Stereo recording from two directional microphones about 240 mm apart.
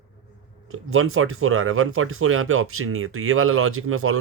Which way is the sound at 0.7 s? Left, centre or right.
Right.